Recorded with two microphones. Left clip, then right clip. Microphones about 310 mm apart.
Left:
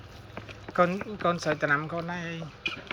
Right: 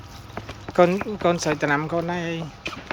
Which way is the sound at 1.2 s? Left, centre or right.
Centre.